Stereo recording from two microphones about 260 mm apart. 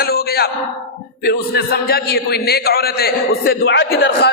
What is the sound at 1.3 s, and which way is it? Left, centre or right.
A man's voice, left.